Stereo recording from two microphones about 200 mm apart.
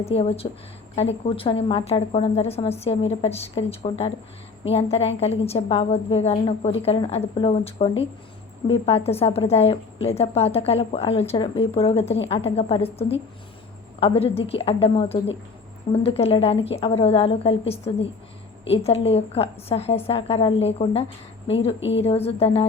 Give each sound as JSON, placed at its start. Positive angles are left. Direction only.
{"t": 0.0, "sound": "a woman's voice", "side_deg": 30}
{"t": 21.8, "sound": "a woman's voice", "side_deg": 65}
{"t": 22.0, "sound": "a woman's voice", "side_deg": 30}